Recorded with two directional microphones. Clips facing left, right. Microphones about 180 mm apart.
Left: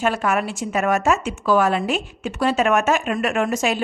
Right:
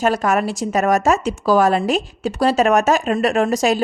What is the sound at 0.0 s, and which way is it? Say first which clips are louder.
A woman's voice: right 3 dB; 40° right (ahead or behind).